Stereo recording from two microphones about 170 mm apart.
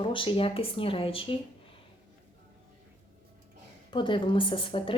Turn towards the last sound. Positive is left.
turn(degrees=30)  # may be behind; listen again after turning